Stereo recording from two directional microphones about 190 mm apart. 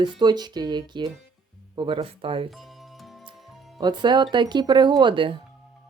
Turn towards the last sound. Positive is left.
turn(degrees=-25)  # may be behind; listen again after turning